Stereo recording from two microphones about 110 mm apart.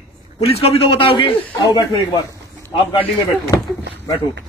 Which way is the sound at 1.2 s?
40° left (ahead or behind).